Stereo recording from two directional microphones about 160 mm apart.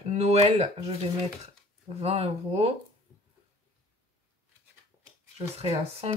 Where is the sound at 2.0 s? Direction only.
40° right (ahead or behind).